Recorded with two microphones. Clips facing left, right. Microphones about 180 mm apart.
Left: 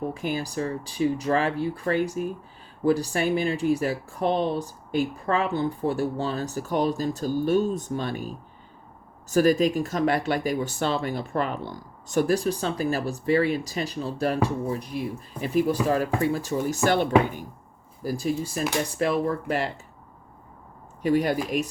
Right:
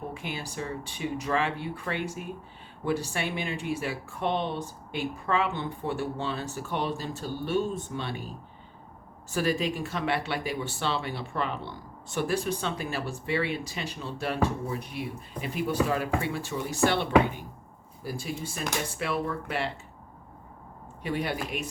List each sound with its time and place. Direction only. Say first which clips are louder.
0.1 s speech: left 8 dB; 40° left (ahead or behind)
9.3 s speech: left 8 dB; 45° left (ahead or behind)
21.0 s speech: left 8 dB; 40° left (ahead or behind)